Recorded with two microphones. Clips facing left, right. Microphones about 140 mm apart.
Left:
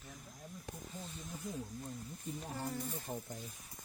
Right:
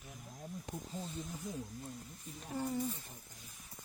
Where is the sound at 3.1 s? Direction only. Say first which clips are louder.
Left 14 dB; 75° left (ahead or behind).